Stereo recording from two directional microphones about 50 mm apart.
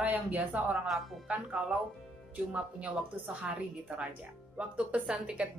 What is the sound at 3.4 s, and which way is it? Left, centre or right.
A woman's voice, right.